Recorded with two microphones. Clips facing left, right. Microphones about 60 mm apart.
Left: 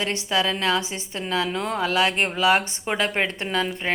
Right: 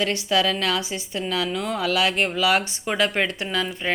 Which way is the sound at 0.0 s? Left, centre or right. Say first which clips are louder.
Right 2 dB; left.